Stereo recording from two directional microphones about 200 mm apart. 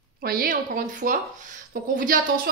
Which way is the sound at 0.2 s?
50° right (ahead or behind).